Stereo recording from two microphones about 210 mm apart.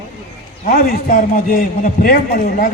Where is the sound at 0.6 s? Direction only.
40° left (ahead or behind).